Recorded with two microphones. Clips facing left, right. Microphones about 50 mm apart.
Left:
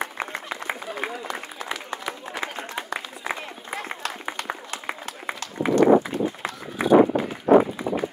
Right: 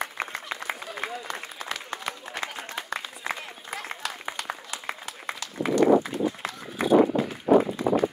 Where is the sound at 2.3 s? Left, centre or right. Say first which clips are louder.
Left 3 dB; centre.